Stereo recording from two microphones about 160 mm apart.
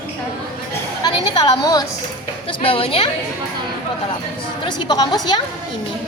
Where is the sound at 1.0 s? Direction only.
25° left (ahead or behind).